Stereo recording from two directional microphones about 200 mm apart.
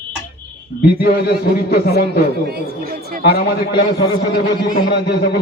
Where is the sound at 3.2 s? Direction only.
50° left (ahead or behind).